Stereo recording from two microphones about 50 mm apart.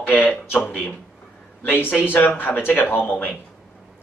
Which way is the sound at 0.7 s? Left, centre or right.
Left.